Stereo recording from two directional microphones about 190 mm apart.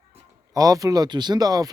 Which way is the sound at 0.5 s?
20° right (ahead or behind).